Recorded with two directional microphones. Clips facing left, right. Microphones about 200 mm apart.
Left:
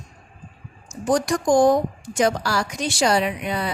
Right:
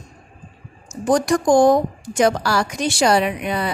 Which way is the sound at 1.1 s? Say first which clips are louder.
Right 3 dB; 60° right (ahead or behind).